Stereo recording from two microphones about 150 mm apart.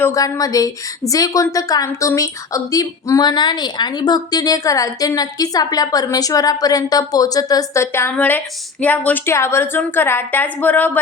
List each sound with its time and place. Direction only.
0.0 s a woman's voice: 20° left (ahead or behind)